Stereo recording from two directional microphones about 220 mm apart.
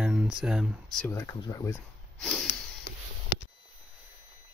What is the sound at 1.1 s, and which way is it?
Speech, 15° left (ahead or behind).